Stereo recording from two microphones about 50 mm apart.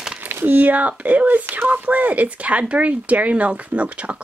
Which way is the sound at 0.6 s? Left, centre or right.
Right.